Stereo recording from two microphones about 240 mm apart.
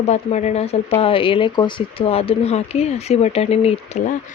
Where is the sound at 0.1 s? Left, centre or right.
Left.